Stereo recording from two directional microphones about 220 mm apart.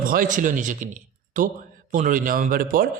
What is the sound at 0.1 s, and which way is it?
A man's voice, 40° right (ahead or behind).